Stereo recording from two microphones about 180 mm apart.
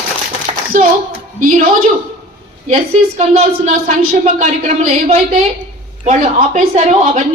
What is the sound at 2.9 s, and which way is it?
Speech, 35° right (ahead or behind).